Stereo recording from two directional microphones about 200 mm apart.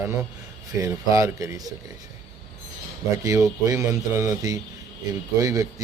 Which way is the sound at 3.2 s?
15° right (ahead or behind).